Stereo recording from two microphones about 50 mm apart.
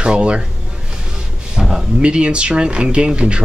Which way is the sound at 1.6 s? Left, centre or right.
Centre.